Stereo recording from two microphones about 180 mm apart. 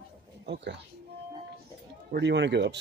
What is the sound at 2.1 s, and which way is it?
Speech, 75° right (ahead or behind).